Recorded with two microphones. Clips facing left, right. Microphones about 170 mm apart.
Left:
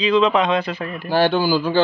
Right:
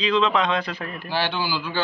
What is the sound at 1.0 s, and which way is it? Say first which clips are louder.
Speech: left 9 dB; 45° left (ahead or behind).